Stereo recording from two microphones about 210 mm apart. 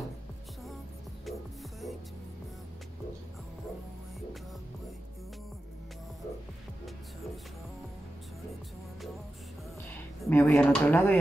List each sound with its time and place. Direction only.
1.2 s music: centre (ahead or behind)
10.2 s speech: 10° left (ahead or behind)